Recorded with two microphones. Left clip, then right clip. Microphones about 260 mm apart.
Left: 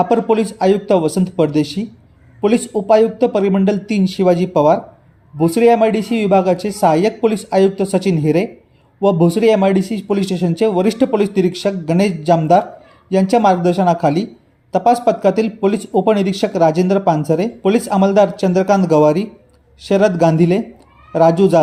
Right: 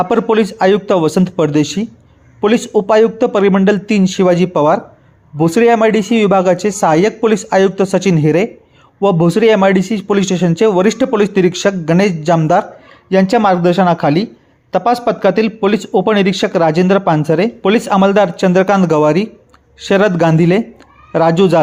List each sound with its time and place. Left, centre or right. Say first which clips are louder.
0.0 s speech: right 2 dB; right